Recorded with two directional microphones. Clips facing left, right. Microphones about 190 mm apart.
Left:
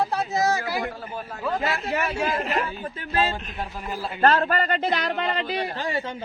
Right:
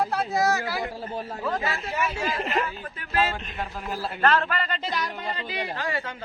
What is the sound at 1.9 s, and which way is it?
Speech, 60° left (ahead or behind).